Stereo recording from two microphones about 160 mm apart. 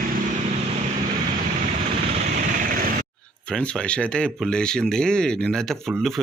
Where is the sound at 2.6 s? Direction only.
60° right (ahead or behind).